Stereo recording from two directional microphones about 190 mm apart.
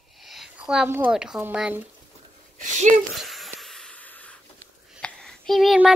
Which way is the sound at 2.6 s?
40° right (ahead or behind).